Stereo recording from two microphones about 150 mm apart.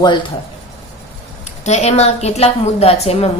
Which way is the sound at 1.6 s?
50° left (ahead or behind).